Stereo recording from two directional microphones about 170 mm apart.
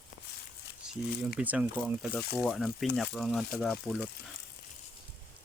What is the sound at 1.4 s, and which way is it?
Speech, 10° right (ahead or behind).